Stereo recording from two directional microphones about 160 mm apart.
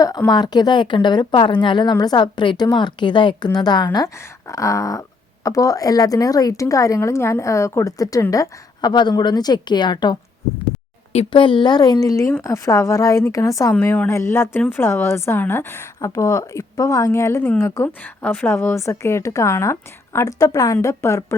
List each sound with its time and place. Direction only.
0.3 s a woman's voice: 25° left (ahead or behind)
13.7 s a woman's voice: 10° left (ahead or behind)